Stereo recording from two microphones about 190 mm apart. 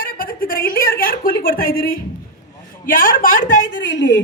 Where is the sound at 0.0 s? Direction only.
50° left (ahead or behind).